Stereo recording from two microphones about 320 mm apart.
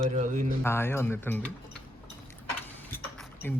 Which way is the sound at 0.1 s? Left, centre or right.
Right.